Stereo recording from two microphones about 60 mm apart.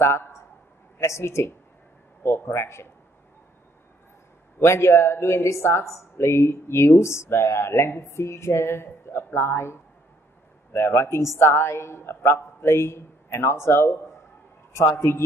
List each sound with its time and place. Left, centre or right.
0.9 s speech: left
4.6 s speech: left